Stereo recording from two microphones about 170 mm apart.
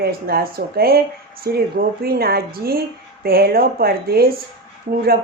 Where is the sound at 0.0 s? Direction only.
65° right (ahead or behind).